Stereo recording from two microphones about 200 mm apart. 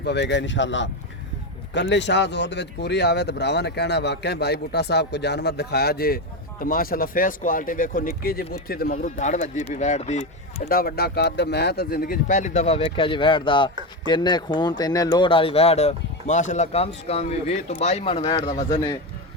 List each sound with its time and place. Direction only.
0.0 s a man's voice: 60° left (ahead or behind); by 10.2 s 35° left (ahead or behind)
10.7 s a man's voice: 50° left (ahead or behind); by 18.9 s 20° left (ahead or behind)